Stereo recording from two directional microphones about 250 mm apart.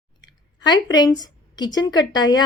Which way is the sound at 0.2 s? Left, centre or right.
Centre.